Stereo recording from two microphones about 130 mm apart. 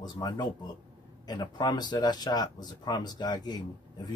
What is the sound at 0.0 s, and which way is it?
Speech, 30° left (ahead or behind).